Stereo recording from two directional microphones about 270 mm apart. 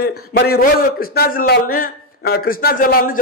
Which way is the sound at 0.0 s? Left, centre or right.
Left.